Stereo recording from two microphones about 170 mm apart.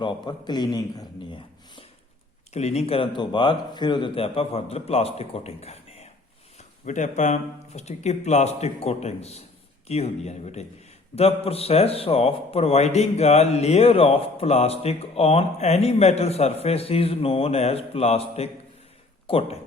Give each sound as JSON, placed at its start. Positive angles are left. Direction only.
{"t": 0.0, "sound": "a man's voice", "side_deg": 30}
{"t": 2.5, "sound": "a man's voice", "side_deg": 40}